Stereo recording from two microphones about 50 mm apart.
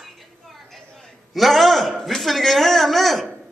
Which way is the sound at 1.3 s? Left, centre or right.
Centre.